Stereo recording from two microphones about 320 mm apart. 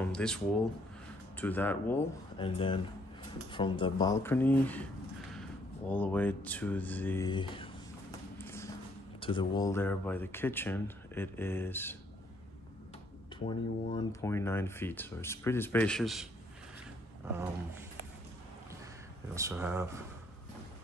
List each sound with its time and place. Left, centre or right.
0.0 s speech: centre
1.4 s speech: centre
2.3 s speech: centre
8.4 s clip-clop: centre
9.2 s speech: centre
13.9 s speech: centre
19.3 s speech: centre